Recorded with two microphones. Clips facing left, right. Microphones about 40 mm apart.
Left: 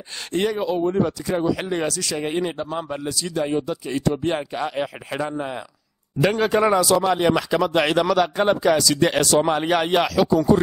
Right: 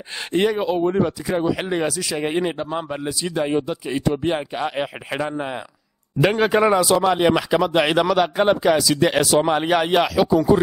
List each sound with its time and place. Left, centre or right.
0.3 s speech: centre
1.0 s a man's voice: centre